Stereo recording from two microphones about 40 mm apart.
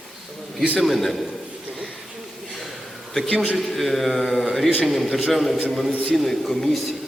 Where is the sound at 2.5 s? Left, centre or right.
Centre.